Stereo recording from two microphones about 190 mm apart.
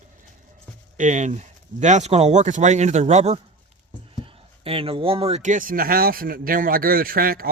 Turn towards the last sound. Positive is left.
turn(degrees=-50)  # may be behind; listen again after turning